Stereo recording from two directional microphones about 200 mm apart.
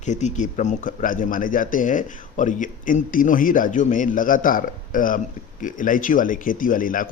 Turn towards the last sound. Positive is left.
turn(degrees=45)  # may be behind; listen again after turning